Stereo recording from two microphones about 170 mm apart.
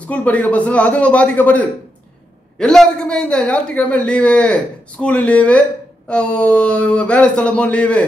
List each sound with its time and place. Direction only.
0.0 s a man's voice: 5° left (ahead or behind)